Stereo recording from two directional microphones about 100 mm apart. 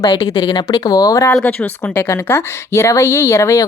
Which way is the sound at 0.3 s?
45° left (ahead or behind).